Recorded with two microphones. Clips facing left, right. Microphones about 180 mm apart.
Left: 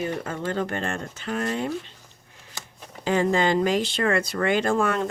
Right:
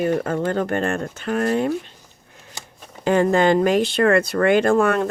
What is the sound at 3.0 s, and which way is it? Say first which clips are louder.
Speech: right 5 dB; 55° right (ahead or behind).